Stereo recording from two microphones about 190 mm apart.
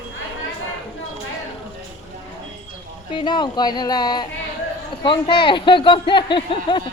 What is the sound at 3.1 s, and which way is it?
Speech, 25° left (ahead or behind).